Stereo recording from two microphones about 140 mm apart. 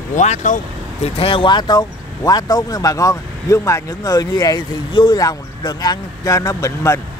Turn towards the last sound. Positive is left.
turn(degrees=20)  # may be behind; listen again after turning